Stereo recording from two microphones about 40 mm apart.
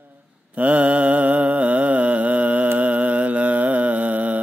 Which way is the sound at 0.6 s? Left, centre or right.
Right.